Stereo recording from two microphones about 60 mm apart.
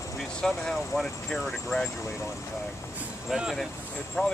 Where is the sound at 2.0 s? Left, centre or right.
Left.